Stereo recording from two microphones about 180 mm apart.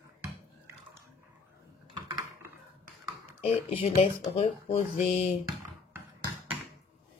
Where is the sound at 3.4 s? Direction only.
35° left (ahead or behind).